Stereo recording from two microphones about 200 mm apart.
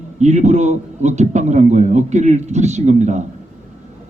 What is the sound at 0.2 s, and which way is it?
A man's voice, 35° right (ahead or behind).